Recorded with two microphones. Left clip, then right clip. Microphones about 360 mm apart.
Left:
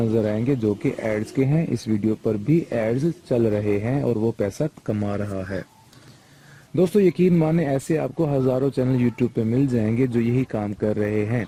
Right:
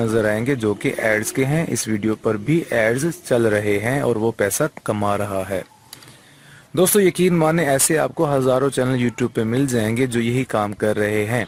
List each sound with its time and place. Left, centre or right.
0.3 s speech: right
6.7 s speech: right